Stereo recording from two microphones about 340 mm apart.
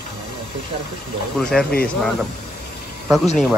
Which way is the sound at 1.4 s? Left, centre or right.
Centre.